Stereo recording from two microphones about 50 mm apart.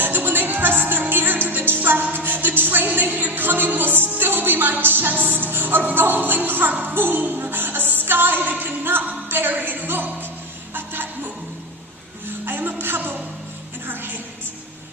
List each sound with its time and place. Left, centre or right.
0.0 s music: right
12.5 s music: right